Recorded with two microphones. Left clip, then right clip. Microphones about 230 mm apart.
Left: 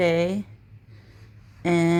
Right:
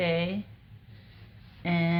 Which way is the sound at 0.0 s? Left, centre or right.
Left.